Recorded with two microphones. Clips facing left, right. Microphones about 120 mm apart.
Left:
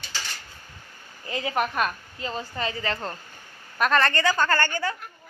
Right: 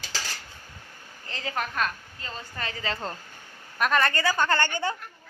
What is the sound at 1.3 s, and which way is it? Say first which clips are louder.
A woman's voice: left 6 dB; 15° left (ahead or behind).